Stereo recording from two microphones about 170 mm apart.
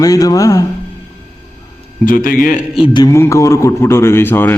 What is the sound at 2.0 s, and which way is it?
Speech, 55° left (ahead or behind).